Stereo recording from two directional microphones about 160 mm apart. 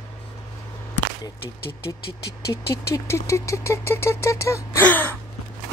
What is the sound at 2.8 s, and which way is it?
A woman's voice, 15° left (ahead or behind).